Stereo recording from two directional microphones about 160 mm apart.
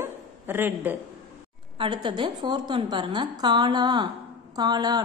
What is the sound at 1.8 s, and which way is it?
A woman's voice, 30° right (ahead or behind).